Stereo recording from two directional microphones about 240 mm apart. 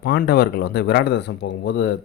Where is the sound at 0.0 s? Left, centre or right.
Left.